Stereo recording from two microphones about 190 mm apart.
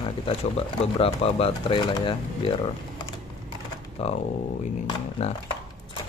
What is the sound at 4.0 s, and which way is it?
Speech, 30° left (ahead or behind).